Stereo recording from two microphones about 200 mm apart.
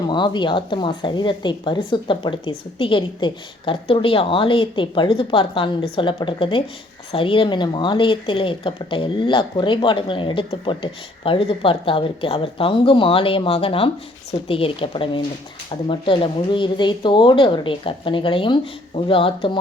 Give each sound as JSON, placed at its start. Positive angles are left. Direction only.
{"t": 0.1, "sound": "a woman's voice", "side_deg": 20}